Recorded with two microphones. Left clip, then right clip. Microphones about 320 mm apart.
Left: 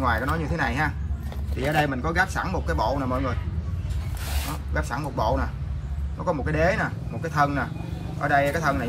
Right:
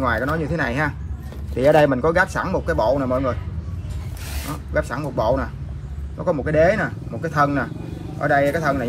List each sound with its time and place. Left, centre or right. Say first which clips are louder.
0.0 s speech: right 4 dB; centre
4.8 s speech: right 1 dB; centre